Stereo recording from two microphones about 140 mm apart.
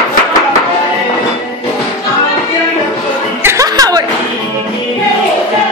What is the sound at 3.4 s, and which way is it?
Music, 20° right (ahead or behind).